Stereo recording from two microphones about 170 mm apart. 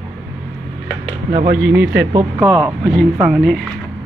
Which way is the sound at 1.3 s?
65° right (ahead or behind).